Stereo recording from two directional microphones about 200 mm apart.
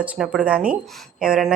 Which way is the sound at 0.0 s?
5° right (ahead or behind).